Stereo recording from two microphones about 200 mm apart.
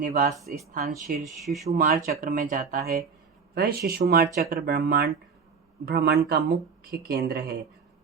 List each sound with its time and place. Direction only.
0.0 s speech: 45° right (ahead or behind)
1.2 s speech: centre (ahead or behind)
1.7 s speech: 50° right (ahead or behind)